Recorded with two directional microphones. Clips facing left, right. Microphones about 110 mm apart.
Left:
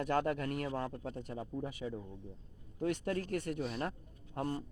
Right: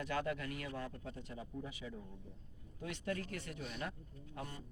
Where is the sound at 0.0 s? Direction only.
45° left (ahead or behind).